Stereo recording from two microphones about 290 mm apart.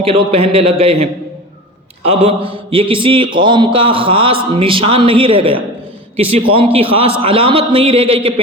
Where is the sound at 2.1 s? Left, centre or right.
Centre.